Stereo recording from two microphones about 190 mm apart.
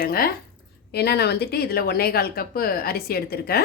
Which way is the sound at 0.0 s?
50° left (ahead or behind).